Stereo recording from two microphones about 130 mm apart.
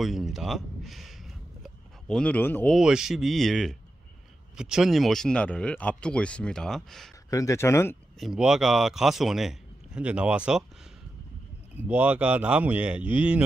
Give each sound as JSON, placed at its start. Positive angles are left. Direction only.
{"t": 0.0, "sound": "speech", "side_deg": 0}
{"t": 2.7, "sound": "speech", "side_deg": -5}
{"t": 7.2, "sound": "speech", "side_deg": 25}
{"t": 8.2, "sound": "speech", "side_deg": -5}
{"t": 11.7, "sound": "speech", "side_deg": -15}